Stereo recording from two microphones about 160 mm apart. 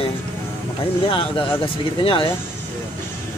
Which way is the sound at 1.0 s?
35° left (ahead or behind).